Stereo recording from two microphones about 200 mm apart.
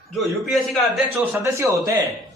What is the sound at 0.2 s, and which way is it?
Speech, centre (ahead or behind).